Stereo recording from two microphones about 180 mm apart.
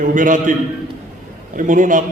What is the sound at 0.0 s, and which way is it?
Speech, 45° right (ahead or behind).